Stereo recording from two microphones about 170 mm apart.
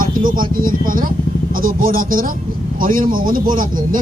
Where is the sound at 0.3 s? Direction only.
55° right (ahead or behind).